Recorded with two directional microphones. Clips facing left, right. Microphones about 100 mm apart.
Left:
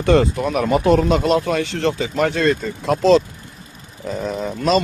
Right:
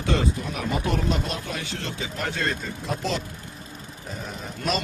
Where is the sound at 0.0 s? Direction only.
65° left (ahead or behind).